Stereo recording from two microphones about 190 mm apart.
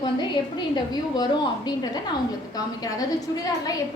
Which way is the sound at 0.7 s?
20° left (ahead or behind).